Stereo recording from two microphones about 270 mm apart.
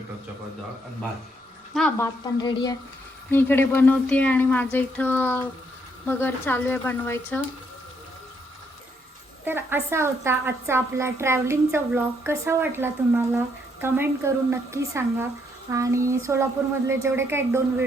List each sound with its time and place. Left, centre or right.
1.7 s a woman's voice: centre
2.4 s speech: centre
9.4 s a woman's voice: centre